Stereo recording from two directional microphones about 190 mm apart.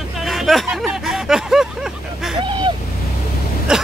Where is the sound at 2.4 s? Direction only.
25° right (ahead or behind).